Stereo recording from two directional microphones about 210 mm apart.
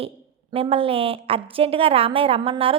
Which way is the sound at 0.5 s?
25° right (ahead or behind).